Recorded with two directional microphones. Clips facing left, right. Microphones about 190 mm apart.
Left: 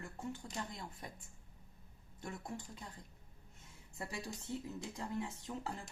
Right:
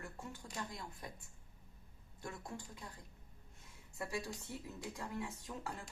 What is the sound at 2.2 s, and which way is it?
Speech, 25° left (ahead or behind).